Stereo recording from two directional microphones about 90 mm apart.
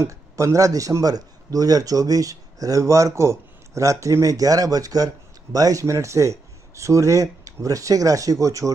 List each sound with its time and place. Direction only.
0.0 s a man's voice: 35° right (ahead or behind)